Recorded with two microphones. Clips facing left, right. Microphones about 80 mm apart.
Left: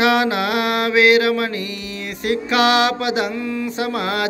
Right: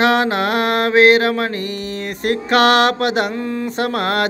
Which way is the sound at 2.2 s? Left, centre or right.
Right.